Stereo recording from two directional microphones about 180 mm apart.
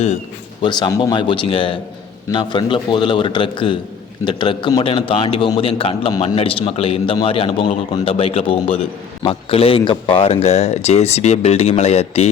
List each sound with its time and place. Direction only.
0.6 s a man's voice: 25° left (ahead or behind)